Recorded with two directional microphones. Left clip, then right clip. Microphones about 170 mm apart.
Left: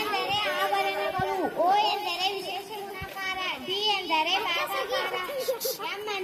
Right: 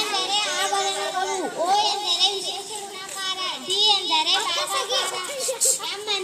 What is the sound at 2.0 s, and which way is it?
Speech, 5° left (ahead or behind).